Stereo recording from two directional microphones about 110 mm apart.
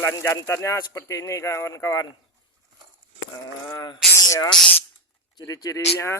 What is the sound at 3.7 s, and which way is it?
Speech, 40° left (ahead or behind).